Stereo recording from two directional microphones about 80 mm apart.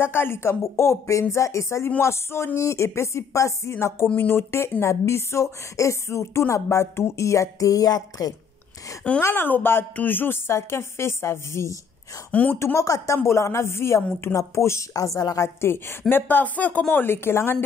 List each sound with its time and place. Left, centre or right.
0.0 s a woman's voice: left
9.2 s a woman's voice: left
12.3 s speech: left
12.5 s a woman's voice: left